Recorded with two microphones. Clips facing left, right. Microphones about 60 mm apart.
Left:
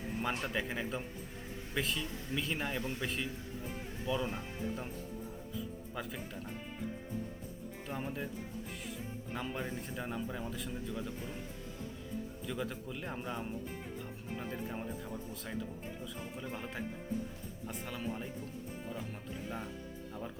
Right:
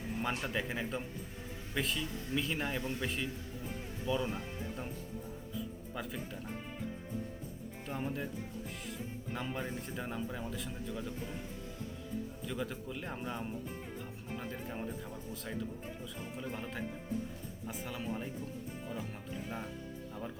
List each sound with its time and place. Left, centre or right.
0.2 s speech: centre
5.9 s speech: centre
7.9 s speech: centre
9.3 s speech: centre
12.5 s speech: centre